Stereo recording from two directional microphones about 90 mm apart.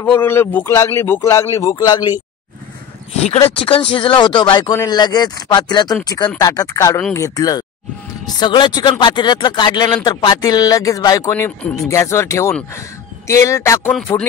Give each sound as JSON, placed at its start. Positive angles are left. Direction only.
{"t": 0.0, "sound": "a man's voice", "side_deg": 20}
{"t": 3.4, "sound": "a man's voice", "side_deg": 90}
{"t": 8.4, "sound": "speech", "side_deg": 60}
{"t": 11.3, "sound": "a man's voice", "side_deg": 25}